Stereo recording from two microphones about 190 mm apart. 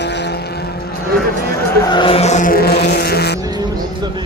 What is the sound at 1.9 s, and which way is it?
Vehicle, 30° left (ahead or behind).